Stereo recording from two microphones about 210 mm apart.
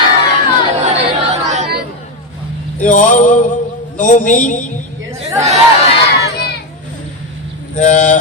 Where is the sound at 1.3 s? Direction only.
35° right (ahead or behind).